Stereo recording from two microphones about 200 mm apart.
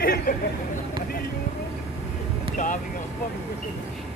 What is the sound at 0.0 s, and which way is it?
Vehicle, 45° left (ahead or behind).